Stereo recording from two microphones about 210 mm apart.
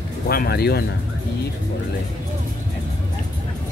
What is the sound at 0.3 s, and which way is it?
Speech, 45° left (ahead or behind).